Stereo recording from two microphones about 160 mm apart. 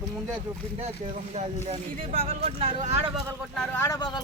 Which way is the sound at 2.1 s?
35° right (ahead or behind).